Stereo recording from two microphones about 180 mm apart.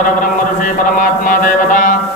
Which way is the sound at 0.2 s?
45° left (ahead or behind).